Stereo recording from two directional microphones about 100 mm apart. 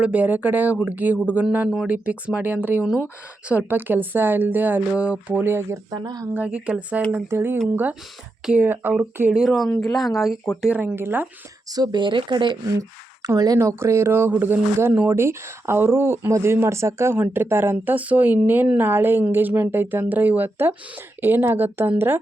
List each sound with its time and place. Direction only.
0.0 s speech: 15° right (ahead or behind)
2.8 s speech: 5° right (ahead or behind)
3.5 s speech: 15° right (ahead or behind)
6.0 s speech: 40° right (ahead or behind)
6.3 s speech: 15° right (ahead or behind)
8.6 s speech: 20° right (ahead or behind)
9.3 s speech: 5° right (ahead or behind)
10.6 s speech: 15° right (ahead or behind)
11.7 s speech: 40° right (ahead or behind)
13.2 s speech: 35° right (ahead or behind); by 22.2 s 20° right (ahead or behind)